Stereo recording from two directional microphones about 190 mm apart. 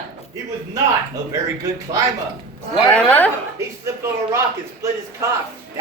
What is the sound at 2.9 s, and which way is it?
Chuckle, 5° left (ahead or behind).